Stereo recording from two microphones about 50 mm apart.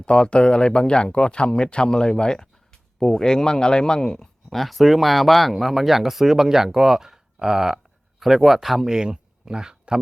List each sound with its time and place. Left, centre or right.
0.0 s speech: centre
4.4 s speech: centre
9.0 s speech: centre